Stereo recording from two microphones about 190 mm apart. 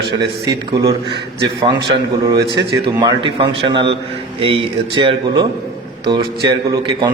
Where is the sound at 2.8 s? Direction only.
25° right (ahead or behind).